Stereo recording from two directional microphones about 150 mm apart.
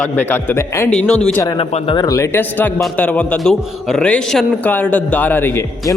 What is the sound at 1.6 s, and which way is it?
A man's voice, 35° left (ahead or behind).